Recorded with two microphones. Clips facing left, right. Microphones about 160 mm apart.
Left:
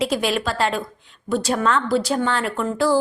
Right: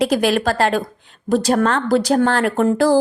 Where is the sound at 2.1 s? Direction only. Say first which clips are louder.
Right 6 dB; 60° right (ahead or behind).